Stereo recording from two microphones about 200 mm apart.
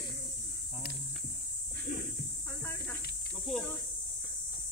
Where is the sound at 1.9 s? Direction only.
45° left (ahead or behind).